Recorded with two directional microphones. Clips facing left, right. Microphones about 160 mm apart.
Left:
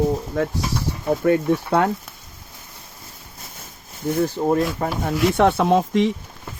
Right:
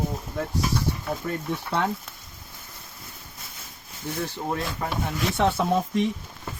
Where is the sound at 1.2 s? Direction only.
65° left (ahead or behind).